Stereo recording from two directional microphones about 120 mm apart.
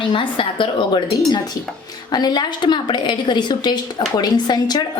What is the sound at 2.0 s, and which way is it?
Speech, 35° left (ahead or behind).